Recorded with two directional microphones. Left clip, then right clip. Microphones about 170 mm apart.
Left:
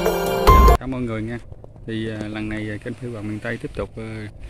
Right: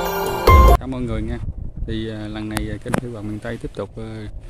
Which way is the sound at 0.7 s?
Centre (ahead or behind).